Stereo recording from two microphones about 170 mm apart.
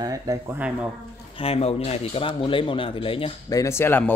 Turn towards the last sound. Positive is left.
turn(degrees=10)  # may be behind; listen again after turning